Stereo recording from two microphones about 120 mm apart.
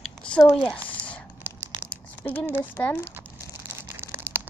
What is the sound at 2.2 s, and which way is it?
Speech, 15° left (ahead or behind).